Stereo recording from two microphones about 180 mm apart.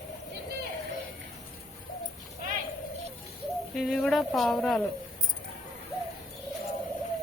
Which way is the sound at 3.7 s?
Centre (ahead or behind).